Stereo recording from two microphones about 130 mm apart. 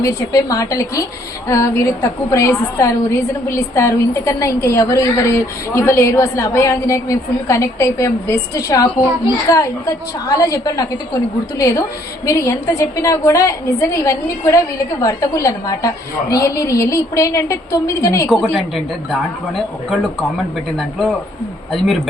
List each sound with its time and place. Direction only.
0.0 s a woman's voice: 25° left (ahead or behind)
19.1 s speech: centre (ahead or behind)